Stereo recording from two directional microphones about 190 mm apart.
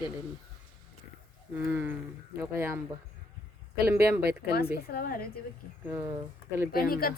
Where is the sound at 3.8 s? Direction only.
10° right (ahead or behind).